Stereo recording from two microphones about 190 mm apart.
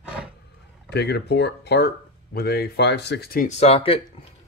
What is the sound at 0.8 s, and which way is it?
Speech, 60° left (ahead or behind).